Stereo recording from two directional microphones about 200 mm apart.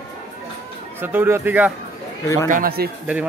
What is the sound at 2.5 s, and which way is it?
Speech, 45° right (ahead or behind).